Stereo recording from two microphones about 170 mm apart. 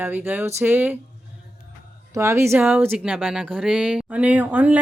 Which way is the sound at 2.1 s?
15° right (ahead or behind).